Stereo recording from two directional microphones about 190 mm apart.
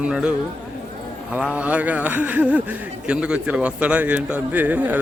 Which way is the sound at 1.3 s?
5° right (ahead or behind).